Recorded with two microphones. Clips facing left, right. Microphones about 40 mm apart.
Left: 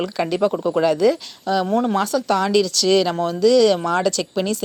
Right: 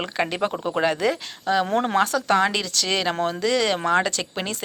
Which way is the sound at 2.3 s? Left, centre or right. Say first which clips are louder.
Left 4 dB; right.